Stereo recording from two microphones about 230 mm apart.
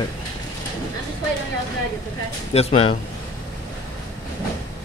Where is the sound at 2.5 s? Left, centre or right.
Left.